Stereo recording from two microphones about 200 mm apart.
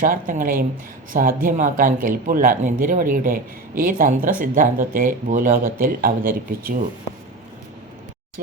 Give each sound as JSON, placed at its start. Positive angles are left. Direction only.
{"t": 0.0, "sound": "speech", "side_deg": -40}